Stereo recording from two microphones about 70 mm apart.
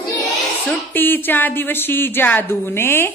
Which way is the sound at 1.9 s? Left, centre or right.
Left.